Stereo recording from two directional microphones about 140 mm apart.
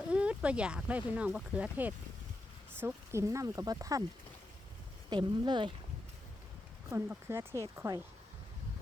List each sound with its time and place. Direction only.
0.1 s speech: 10° right (ahead or behind); by 4.0 s 25° right (ahead or behind)
5.0 s speech: 30° right (ahead or behind)
6.9 s speech: 20° right (ahead or behind)